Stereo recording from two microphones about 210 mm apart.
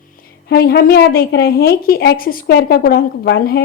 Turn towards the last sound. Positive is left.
turn(degrees=50)  # may be behind; listen again after turning